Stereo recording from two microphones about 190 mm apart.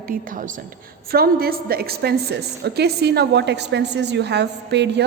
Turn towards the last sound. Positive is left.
turn(degrees=-65)  # may be behind; listen again after turning